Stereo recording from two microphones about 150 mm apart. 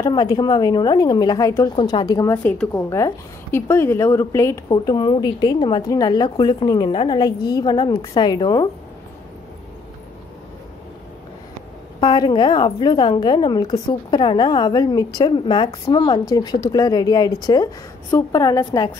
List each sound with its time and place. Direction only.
0.0 s a woman's voice: 25° left (ahead or behind)
1.8 s a woman's voice: 30° left (ahead or behind)
12.0 s a woman's voice: 30° left (ahead or behind)